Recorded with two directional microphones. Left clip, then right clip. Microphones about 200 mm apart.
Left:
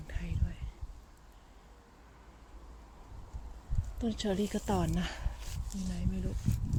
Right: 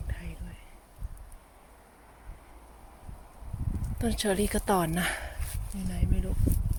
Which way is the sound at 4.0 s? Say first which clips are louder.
Right 5 dB; 15° right (ahead or behind).